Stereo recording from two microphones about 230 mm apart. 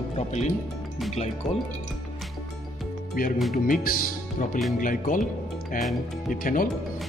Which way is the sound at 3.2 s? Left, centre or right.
Left.